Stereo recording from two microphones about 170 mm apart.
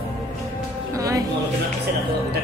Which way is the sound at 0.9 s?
20° right (ahead or behind).